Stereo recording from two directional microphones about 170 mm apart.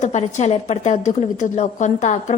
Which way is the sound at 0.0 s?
45° left (ahead or behind).